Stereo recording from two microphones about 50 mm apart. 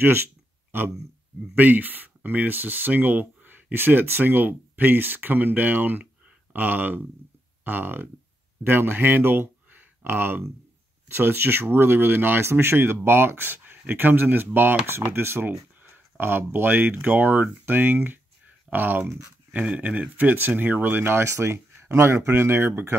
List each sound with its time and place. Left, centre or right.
0.0 s a sound: right
1.5 s speech: right
14.9 s speech: right
15.4 s speech: right